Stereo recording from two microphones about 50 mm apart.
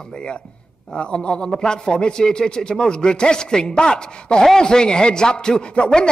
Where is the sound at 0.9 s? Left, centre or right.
Centre.